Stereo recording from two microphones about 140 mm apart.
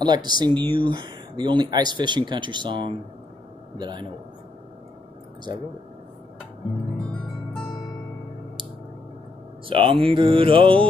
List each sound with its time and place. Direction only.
0.0 s speech: 30° right (ahead or behind)
9.7 s speech: 40° right (ahead or behind)